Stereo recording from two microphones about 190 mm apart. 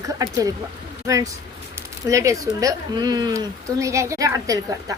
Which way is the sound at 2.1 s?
15° right (ahead or behind).